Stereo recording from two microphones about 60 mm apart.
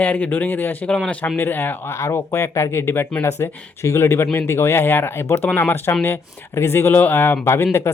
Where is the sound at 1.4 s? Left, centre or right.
Left.